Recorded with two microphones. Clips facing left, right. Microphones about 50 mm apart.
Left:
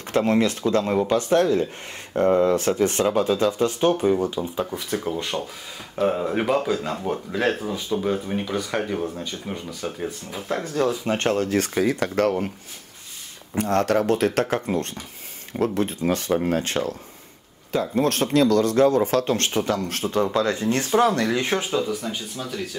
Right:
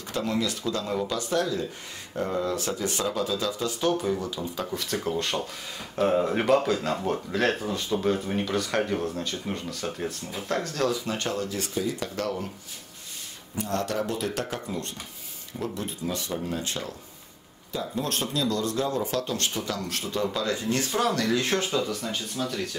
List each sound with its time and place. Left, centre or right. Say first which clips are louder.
0.1 s speech: left 8 dB; left
4.4 s speech: left 5 dB; centre
11.1 s speech: left 7 dB; left
13.6 s speech: left 8 dB; left; by 22.8 s centre